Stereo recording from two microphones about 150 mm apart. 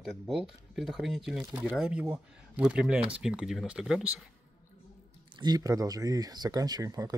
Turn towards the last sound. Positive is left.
turn(degrees=-25)  # may be behind; listen again after turning